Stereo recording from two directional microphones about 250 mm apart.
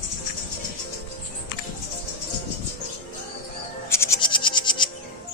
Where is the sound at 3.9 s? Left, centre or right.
Centre.